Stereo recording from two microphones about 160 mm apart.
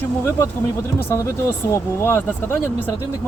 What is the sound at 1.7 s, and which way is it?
Speech, 15° left (ahead or behind).